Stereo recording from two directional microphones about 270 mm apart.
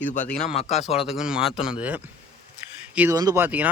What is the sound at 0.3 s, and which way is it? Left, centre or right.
Speech, left.